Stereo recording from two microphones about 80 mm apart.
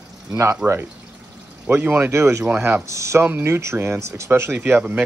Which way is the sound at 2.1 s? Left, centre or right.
Right.